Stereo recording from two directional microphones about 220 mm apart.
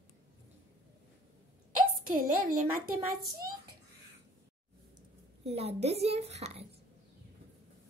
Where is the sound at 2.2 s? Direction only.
85° right.